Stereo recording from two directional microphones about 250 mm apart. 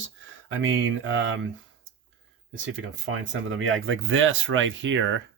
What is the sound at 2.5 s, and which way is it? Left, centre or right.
Speech, right.